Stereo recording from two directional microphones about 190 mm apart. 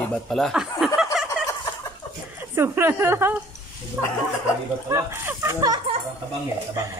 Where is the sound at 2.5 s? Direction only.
15° right (ahead or behind).